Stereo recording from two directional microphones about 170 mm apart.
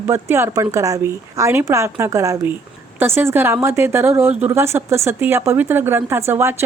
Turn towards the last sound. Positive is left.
turn(degrees=-15)  # may be behind; listen again after turning